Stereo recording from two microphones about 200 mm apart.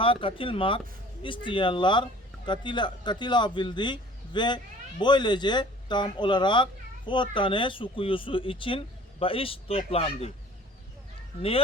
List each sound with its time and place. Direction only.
0.0 s speech: 25° left (ahead or behind)
11.3 s speech: 30° left (ahead or behind)